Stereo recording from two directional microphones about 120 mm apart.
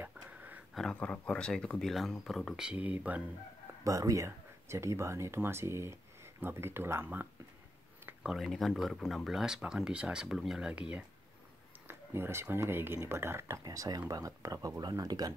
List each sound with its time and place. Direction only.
0.0 s a sound: 15° right (ahead or behind)
0.7 s speech: 5° left (ahead or behind); by 3.3 s 10° right (ahead or behind)
3.8 s speech: 30° right (ahead or behind)
8.2 s speech: 5° right (ahead or behind)
11.9 s speech: 20° right (ahead or behind)